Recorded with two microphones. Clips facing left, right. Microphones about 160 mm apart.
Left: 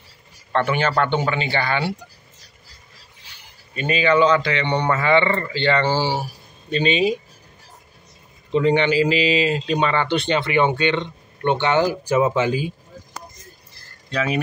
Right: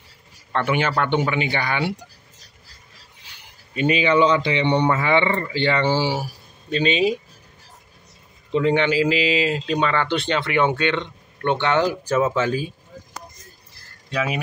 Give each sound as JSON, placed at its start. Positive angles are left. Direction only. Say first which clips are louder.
{"t": 0.5, "sound": "speech", "louder": "left 1 dB", "side_deg": -10}
{"t": 3.7, "sound": "speech", "louder": "even", "side_deg": -15}
{"t": 6.7, "sound": "speech", "louder": "left 1 dB", "side_deg": 0}
{"t": 8.5, "sound": "speech", "louder": "left 1 dB", "side_deg": 0}
{"t": 14.1, "sound": "speech", "louder": "left 2 dB", "side_deg": -5}